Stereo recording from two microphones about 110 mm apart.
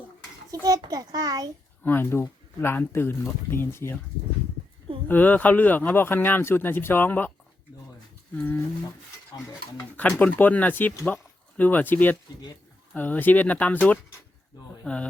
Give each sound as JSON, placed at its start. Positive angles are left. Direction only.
{"t": 0.5, "sound": "a child's voice", "side_deg": -30}
{"t": 1.8, "sound": "speech", "side_deg": 20}
{"t": 5.0, "sound": "speech", "side_deg": 15}
{"t": 10.2, "sound": "speech", "side_deg": 15}